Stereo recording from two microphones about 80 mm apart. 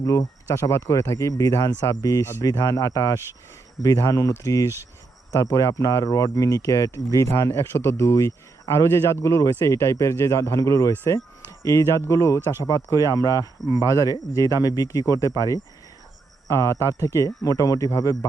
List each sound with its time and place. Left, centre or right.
0.0 s speech: left
10.9 s speech: left
13.6 s speech: centre
14.0 s speech: left
16.6 s speech: left